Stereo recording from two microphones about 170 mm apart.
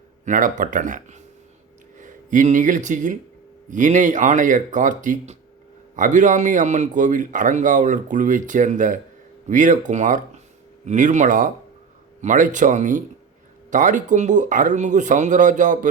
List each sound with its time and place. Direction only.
0.3 s speech: 50° right (ahead or behind)